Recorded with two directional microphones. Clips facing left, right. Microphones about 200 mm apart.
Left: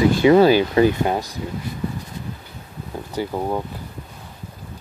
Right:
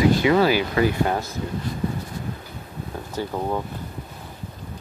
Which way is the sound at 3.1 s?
10° left (ahead or behind).